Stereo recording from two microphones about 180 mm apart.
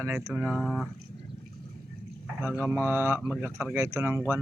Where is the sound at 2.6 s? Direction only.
15° right (ahead or behind).